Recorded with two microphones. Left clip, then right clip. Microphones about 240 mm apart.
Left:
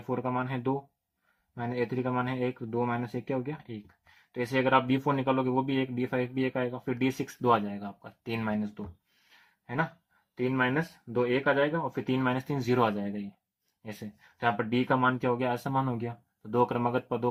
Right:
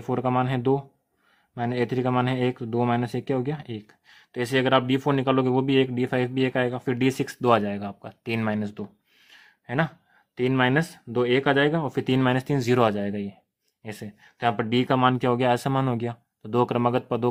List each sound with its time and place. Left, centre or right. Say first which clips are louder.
0.1 s speech: right 7 dB; right